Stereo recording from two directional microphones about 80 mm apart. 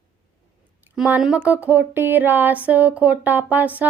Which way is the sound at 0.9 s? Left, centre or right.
Centre.